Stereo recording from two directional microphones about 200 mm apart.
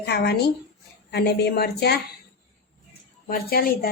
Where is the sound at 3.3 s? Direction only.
50° left (ahead or behind).